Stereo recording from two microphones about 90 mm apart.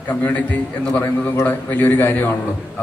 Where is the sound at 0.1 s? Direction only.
15° left (ahead or behind).